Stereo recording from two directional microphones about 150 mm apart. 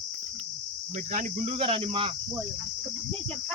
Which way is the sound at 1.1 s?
55° right (ahead or behind).